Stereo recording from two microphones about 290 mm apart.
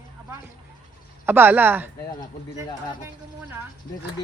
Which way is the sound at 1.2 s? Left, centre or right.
Centre.